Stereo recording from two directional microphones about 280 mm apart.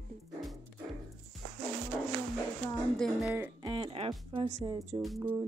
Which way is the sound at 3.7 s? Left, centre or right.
Centre.